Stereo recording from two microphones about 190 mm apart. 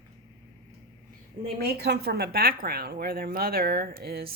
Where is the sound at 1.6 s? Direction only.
55° right (ahead or behind).